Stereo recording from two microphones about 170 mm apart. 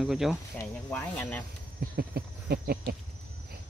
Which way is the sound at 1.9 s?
65° right (ahead or behind).